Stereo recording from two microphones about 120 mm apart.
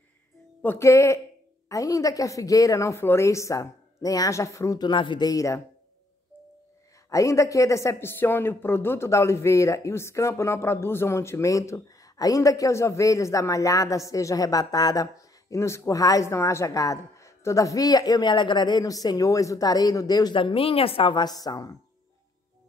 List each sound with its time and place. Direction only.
0.6 s speech: 20° left (ahead or behind)
4.8 s speech: 40° left (ahead or behind)
7.1 s speech: 25° left (ahead or behind)